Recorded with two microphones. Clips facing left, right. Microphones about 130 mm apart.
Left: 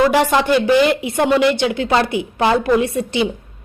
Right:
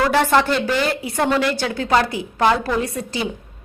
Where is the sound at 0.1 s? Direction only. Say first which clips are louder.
Left 2 dB; 10° left (ahead or behind).